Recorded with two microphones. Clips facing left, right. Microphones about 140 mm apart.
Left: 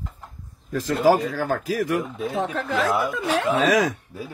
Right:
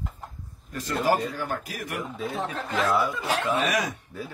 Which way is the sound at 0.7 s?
90° left.